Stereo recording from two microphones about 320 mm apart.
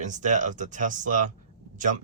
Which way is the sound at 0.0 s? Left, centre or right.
Right.